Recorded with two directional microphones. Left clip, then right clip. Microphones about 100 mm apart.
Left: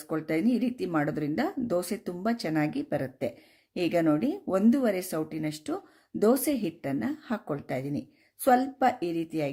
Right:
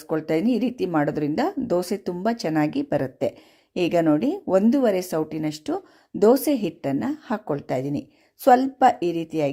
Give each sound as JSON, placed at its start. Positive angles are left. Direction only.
{"t": 0.1, "sound": "speech", "side_deg": -45}